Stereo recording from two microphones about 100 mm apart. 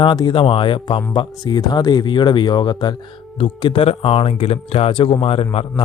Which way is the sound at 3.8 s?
70° left (ahead or behind).